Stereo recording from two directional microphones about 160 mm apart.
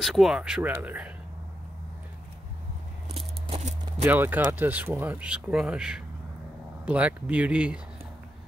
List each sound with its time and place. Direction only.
0.0 s speech: centre (ahead or behind)
3.4 s a sound: 40° right (ahead or behind)
4.0 s speech: 10° right (ahead or behind)